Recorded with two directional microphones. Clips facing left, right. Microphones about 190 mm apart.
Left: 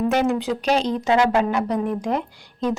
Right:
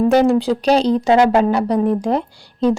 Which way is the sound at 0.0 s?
35° right (ahead or behind).